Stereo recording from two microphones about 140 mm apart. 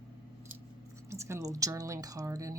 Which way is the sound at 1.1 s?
20° right (ahead or behind).